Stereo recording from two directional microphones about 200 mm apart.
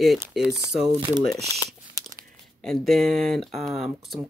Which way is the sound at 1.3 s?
15° left (ahead or behind).